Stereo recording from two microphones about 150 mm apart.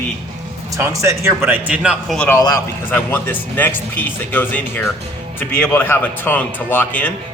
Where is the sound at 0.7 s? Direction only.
15° right (ahead or behind).